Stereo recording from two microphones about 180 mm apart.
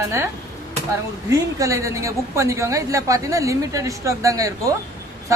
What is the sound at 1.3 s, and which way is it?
A woman's voice, 15° right (ahead or behind).